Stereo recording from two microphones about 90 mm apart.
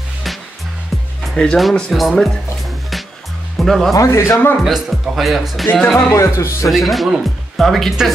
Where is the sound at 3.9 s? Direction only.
35° left (ahead or behind).